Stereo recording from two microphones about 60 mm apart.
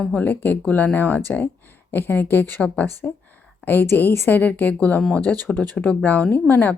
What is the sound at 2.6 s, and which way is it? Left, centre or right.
Speech, left.